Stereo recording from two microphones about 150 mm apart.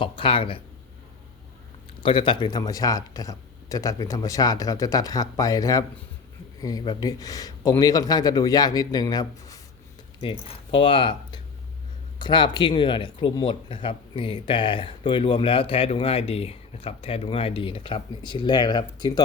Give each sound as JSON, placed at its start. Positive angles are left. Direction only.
{"t": 0.0, "sound": "speech", "side_deg": 35}
{"t": 2.0, "sound": "speech", "side_deg": 35}
{"t": 10.2, "sound": "speech", "side_deg": 35}